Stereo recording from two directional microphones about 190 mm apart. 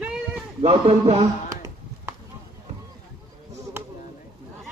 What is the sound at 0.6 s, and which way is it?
Speech, 35° right (ahead or behind).